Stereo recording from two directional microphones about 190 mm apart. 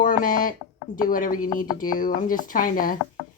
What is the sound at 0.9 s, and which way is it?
Speech, 45° left (ahead or behind).